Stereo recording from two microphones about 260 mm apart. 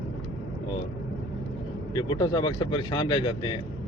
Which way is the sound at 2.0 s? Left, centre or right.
Centre.